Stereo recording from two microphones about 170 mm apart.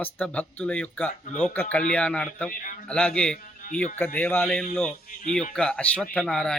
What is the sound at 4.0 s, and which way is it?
Speech, 10° left (ahead or behind).